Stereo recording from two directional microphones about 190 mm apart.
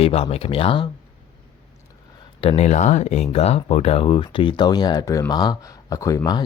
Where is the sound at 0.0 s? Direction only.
30° left (ahead or behind).